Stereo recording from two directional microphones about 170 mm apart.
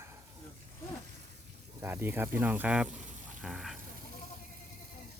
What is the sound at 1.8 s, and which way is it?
Speech, 15° right (ahead or behind).